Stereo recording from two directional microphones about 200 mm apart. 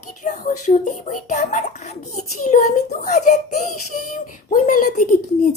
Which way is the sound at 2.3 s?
35° left (ahead or behind).